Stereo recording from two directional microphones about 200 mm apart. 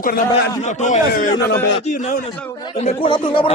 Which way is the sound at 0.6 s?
35° left (ahead or behind).